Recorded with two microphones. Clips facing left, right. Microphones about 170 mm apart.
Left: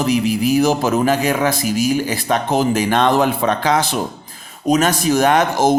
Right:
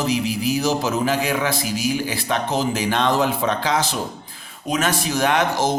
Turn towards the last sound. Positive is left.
turn(degrees=45)  # may be behind; listen again after turning